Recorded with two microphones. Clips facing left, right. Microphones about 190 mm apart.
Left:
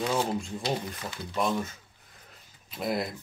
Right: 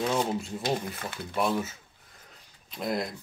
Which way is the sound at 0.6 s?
50° right (ahead or behind).